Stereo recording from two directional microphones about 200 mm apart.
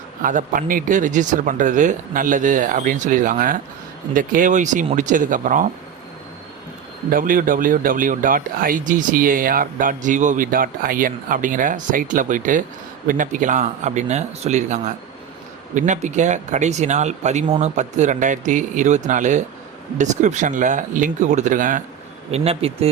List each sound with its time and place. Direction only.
0.2 s speech: 40° right (ahead or behind)
7.1 s speech: 40° right (ahead or behind)
22.3 s speech: 30° right (ahead or behind)